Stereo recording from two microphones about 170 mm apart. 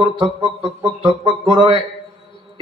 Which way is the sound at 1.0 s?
30° right (ahead or behind).